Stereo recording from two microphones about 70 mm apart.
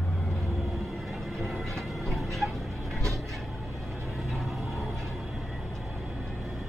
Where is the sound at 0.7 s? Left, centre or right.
Centre.